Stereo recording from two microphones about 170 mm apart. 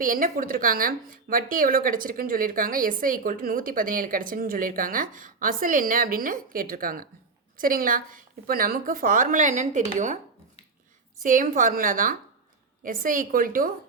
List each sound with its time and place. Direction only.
0.0 s speech: 55° right (ahead or behind)
11.2 s speech: 50° right (ahead or behind)